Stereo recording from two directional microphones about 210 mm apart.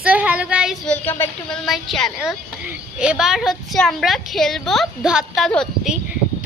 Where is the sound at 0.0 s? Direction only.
5° right (ahead or behind).